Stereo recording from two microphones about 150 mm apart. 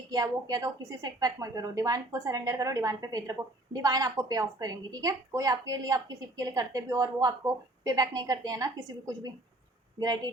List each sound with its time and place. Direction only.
0.1 s a woman's voice: 25° right (ahead or behind)